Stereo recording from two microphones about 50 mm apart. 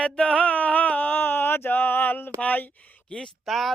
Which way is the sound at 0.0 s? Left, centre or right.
Centre.